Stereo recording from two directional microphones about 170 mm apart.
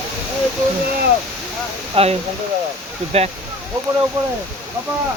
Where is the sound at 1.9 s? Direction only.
35° right (ahead or behind).